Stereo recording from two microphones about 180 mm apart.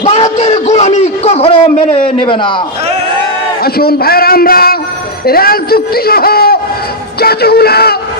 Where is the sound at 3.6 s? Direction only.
60° left (ahead or behind).